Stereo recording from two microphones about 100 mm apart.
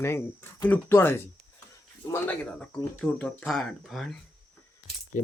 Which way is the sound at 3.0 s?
10° left (ahead or behind).